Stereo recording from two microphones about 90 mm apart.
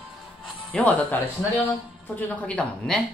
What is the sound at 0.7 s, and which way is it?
Speech, 15° left (ahead or behind).